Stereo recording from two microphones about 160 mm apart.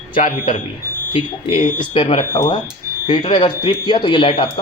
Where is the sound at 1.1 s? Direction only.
35° left (ahead or behind).